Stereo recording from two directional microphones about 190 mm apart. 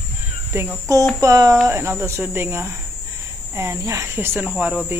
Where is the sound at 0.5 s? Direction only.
15° right (ahead or behind).